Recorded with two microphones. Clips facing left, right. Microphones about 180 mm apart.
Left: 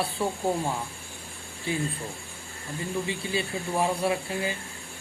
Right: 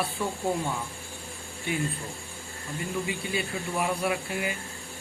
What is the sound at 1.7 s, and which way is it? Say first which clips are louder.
Speech: left 1 dB; 30° left (ahead or behind).